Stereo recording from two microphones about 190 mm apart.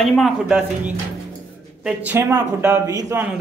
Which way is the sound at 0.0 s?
Centre (ahead or behind).